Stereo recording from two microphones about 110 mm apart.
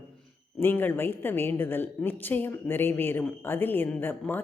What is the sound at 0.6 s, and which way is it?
A woman's voice, 20° left (ahead or behind).